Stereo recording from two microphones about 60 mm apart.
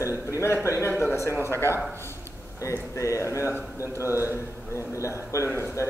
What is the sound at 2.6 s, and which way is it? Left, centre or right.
A man's voice, left.